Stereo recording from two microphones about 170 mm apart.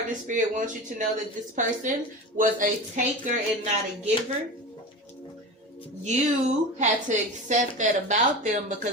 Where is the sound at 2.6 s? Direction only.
45° right (ahead or behind).